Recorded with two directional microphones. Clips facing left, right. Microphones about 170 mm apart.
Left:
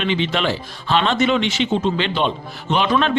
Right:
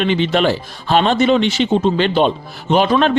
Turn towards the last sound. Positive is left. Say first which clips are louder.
# right 5 dB
turn(degrees=-40)  # may be behind; listen again after turning